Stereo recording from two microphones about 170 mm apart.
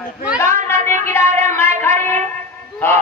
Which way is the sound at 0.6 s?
15° left (ahead or behind).